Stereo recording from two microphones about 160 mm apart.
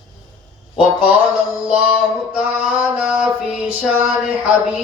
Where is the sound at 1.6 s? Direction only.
5° right (ahead or behind).